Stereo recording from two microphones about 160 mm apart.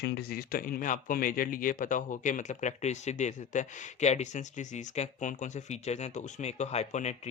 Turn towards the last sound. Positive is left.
turn(degrees=45)  # may be behind; listen again after turning